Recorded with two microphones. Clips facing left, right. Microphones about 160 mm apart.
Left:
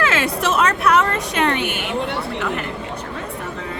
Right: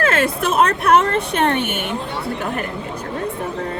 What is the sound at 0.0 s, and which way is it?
Chatter, 45° right (ahead or behind).